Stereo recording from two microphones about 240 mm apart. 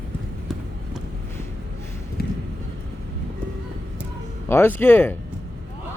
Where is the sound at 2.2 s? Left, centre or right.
Left.